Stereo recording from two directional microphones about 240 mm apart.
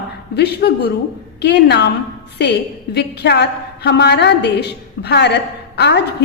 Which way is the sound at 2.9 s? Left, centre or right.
Left.